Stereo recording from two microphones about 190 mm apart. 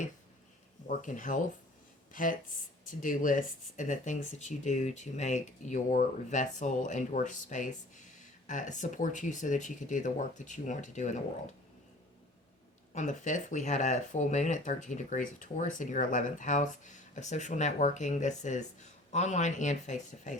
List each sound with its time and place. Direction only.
0.9 s speech: 40° left (ahead or behind)
12.9 s speech: 40° left (ahead or behind)